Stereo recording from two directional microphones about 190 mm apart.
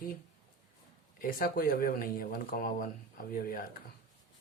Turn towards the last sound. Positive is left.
turn(degrees=50)  # may be behind; listen again after turning